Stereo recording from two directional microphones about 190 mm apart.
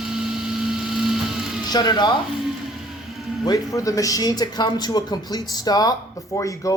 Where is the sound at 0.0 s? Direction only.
Centre (ahead or behind).